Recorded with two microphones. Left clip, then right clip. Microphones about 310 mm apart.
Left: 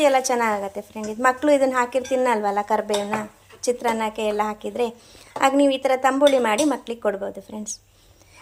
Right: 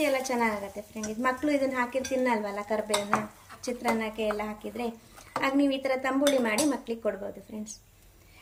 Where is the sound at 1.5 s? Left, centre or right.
Left.